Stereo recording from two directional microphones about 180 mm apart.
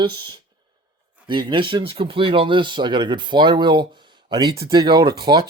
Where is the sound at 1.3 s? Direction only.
25° right (ahead or behind).